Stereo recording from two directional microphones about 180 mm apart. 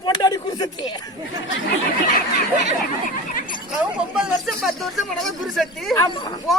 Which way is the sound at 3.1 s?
50° left (ahead or behind).